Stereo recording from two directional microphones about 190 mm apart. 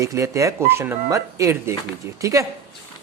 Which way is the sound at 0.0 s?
15° right (ahead or behind).